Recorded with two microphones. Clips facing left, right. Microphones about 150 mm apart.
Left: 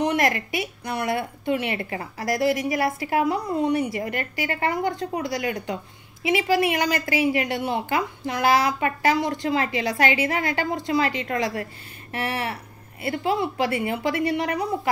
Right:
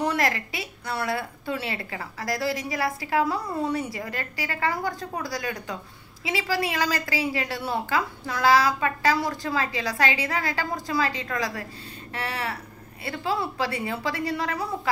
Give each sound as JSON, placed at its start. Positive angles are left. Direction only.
{"t": 0.0, "sound": "a woman's voice", "side_deg": 20}